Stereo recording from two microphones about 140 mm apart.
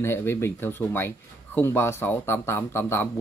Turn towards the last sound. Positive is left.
turn(degrees=15)  # may be behind; listen again after turning